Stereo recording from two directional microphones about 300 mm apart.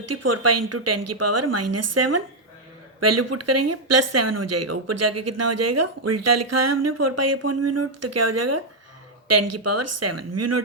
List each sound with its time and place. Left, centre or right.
0.0 s speech: right